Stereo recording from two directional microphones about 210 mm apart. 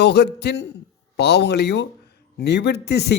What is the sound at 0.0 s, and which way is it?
Speech, 55° left (ahead or behind).